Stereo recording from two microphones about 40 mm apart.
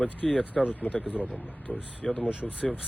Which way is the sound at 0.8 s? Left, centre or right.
Left.